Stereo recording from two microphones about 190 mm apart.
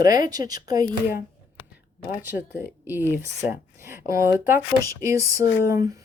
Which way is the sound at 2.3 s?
10° right (ahead or behind).